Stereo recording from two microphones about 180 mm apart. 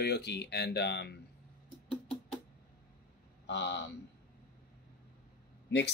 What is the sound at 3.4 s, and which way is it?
Speech, 75° left (ahead or behind).